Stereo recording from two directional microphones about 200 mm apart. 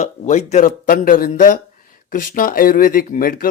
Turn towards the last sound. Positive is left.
turn(degrees=45)  # may be behind; listen again after turning